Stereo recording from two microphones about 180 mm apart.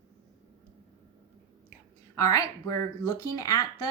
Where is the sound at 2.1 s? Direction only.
20° left (ahead or behind).